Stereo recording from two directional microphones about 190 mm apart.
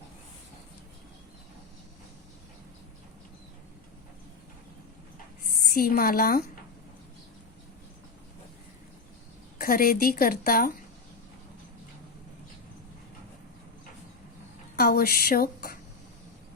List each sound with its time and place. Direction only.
5.6 s a woman's voice: 50° left (ahead or behind)
9.6 s a woman's voice: 50° left (ahead or behind)
14.8 s a woman's voice: 55° left (ahead or behind)